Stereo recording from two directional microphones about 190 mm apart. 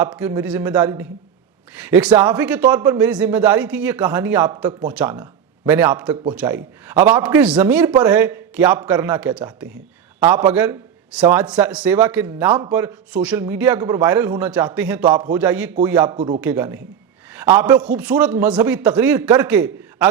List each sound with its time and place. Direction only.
0.0 s a man's voice: 10° right (ahead or behind)
16.1 s speech: 30° right (ahead or behind)
16.4 s a man's voice: 10° right (ahead or behind)